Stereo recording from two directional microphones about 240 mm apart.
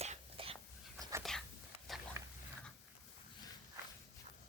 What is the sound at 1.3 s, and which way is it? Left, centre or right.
Whispering, centre.